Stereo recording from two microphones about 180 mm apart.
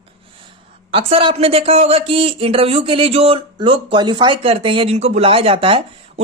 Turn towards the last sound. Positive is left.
turn(degrees=-30)  # may be behind; listen again after turning